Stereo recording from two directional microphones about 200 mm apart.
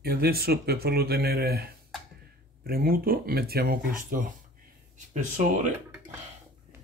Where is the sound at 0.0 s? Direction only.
50° right (ahead or behind).